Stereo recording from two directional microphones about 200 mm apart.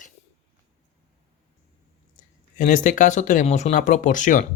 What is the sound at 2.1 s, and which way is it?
Speech, 40° left (ahead or behind).